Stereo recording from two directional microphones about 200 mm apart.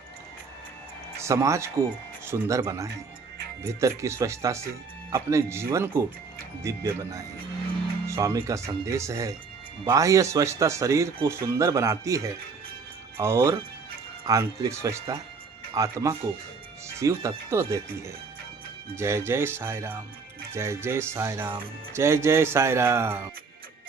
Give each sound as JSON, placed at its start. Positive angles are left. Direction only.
{"t": 1.2, "sound": "speech", "side_deg": -15}